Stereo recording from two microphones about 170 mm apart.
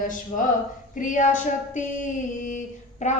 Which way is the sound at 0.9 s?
50° left (ahead or behind).